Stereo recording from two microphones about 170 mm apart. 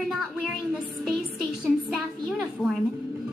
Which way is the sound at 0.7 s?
Centre (ahead or behind).